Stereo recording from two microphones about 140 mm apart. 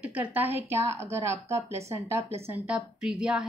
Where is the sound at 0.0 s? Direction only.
10° right (ahead or behind).